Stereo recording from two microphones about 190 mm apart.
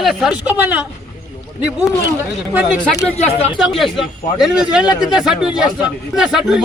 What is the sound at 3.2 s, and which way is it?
Speech, 35° left (ahead or behind).